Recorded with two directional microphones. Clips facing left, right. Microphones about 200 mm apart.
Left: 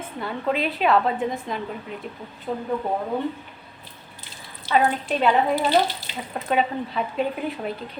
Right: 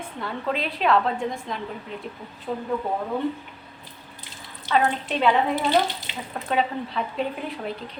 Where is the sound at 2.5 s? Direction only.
20° left (ahead or behind).